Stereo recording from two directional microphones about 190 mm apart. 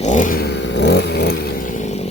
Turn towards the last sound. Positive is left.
turn(degrees=65)  # may be behind; listen again after turning